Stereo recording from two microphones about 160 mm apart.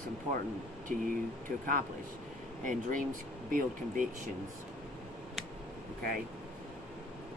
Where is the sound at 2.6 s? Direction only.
55° right (ahead or behind).